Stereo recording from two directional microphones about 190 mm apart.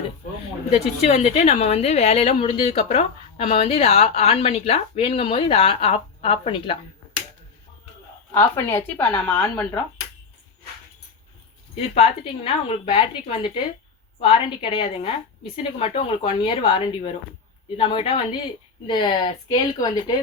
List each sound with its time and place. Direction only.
0.7 s speech: 35° left (ahead or behind)
8.3 s speech: 10° left (ahead or behind)
11.9 s a woman's voice: 30° left (ahead or behind)